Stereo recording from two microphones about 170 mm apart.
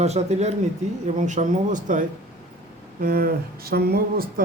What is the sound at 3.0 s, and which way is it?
Speech, 60° right (ahead or behind).